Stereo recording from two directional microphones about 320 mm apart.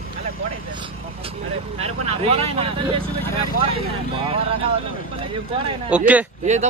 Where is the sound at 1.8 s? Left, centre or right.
Centre.